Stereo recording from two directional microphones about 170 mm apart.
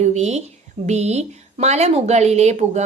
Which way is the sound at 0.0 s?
40° right (ahead or behind).